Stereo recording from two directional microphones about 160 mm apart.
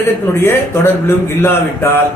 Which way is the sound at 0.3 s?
15° left (ahead or behind).